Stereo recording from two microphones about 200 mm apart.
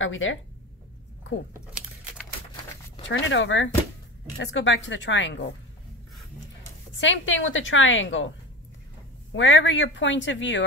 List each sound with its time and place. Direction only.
0.0 s a woman's voice: 75° left (ahead or behind)
3.1 s a woman's voice: 70° left (ahead or behind)
7.0 s a woman's voice: 70° left (ahead or behind)
9.3 s a woman's voice: 70° left (ahead or behind)